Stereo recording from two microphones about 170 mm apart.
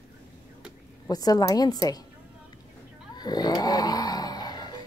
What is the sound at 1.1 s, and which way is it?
Speech, 20° left (ahead or behind).